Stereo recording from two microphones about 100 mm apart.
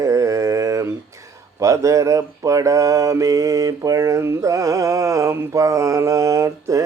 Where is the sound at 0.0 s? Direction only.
30° right (ahead or behind).